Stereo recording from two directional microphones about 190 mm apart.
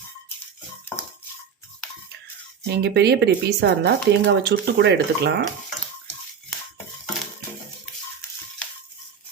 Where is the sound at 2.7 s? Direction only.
60° right (ahead or behind).